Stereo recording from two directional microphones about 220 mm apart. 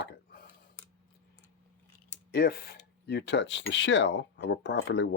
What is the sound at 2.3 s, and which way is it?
Speech, 45° left (ahead or behind).